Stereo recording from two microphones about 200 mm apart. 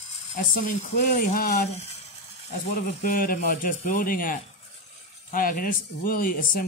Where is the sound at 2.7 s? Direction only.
45° left (ahead or behind).